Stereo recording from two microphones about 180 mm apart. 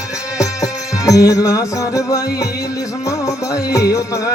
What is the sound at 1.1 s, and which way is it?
Music, 20° left (ahead or behind).